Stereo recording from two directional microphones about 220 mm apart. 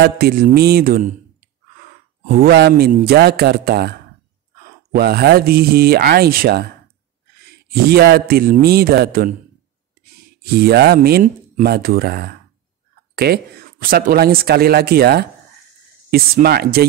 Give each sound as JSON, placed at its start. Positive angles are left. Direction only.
{"t": 0.0, "sound": "speech", "side_deg": -45}
{"t": 2.2, "sound": "speech", "side_deg": -40}
{"t": 4.9, "sound": "speech", "side_deg": -45}
{"t": 10.4, "sound": "speech", "side_deg": -45}